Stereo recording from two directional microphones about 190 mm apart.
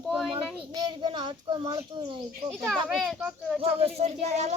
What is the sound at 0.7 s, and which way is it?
A child's voice, 20° right (ahead or behind).